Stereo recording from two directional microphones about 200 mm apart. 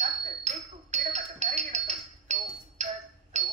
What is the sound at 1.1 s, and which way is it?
Music, 35° right (ahead or behind).